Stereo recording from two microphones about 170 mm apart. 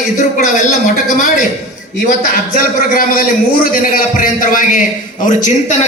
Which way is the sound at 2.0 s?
55° left (ahead or behind).